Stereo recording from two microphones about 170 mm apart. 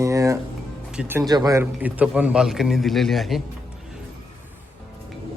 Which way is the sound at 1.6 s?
10° right (ahead or behind).